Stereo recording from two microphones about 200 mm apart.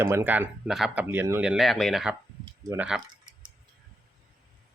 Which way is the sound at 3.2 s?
20° right (ahead or behind).